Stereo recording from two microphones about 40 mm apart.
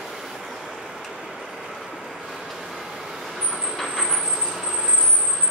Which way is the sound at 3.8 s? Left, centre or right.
Centre.